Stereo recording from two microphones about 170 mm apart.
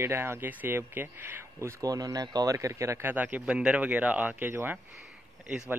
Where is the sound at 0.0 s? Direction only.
15° right (ahead or behind).